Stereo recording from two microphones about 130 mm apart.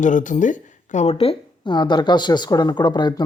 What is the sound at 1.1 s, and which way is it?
Speech, 45° left (ahead or behind).